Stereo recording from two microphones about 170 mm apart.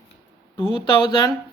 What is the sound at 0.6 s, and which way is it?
Speech, 25° left (ahead or behind).